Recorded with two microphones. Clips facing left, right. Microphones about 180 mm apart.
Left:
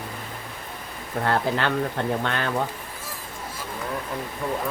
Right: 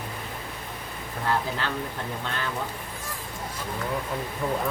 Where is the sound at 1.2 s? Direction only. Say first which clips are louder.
Left 4 dB; 65° left (ahead or behind).